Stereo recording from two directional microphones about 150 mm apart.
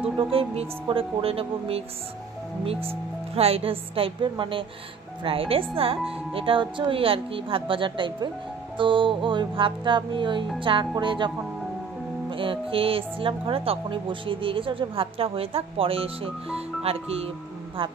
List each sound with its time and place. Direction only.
0.0 s a woman's voice: 40° right (ahead or behind)